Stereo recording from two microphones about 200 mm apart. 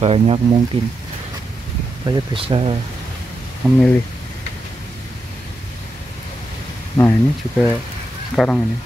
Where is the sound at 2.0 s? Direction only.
25° right (ahead or behind).